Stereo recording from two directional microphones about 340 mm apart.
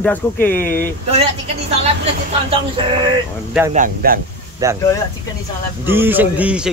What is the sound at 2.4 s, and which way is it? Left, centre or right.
Music, centre.